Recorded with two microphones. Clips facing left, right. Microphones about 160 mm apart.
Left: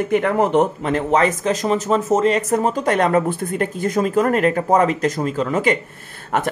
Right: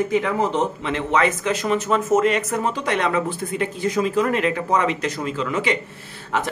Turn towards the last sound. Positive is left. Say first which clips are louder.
# left 3 dB
turn(degrees=55)  # may be behind; listen again after turning